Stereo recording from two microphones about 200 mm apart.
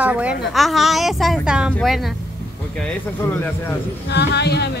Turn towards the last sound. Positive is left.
turn(degrees=55)  # may be behind; listen again after turning